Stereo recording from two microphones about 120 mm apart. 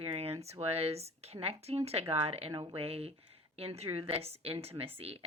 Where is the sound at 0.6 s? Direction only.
60° right (ahead or behind).